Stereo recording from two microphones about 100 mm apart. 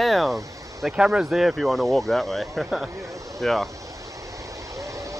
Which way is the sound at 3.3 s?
Centre (ahead or behind).